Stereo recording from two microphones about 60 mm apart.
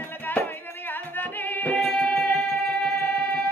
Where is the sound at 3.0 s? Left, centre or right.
Left.